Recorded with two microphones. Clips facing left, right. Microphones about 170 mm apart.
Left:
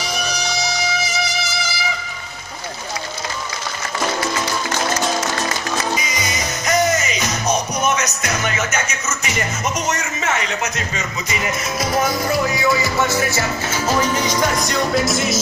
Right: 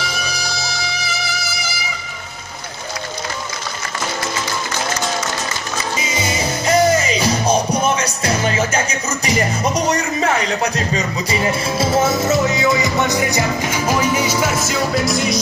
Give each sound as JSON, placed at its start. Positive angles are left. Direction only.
{"t": 5.9, "sound": "music", "side_deg": -30}